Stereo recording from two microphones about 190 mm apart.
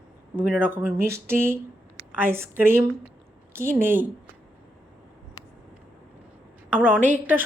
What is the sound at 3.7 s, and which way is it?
Speech, 10° right (ahead or behind).